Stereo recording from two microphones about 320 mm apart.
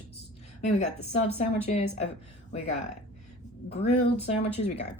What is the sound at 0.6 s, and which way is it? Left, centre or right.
Speech, left.